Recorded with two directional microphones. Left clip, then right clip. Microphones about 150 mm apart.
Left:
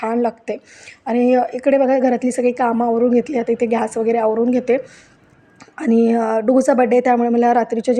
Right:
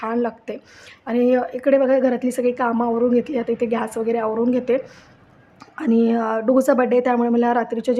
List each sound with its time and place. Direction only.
0.0 s a woman's voice: 20° left (ahead or behind)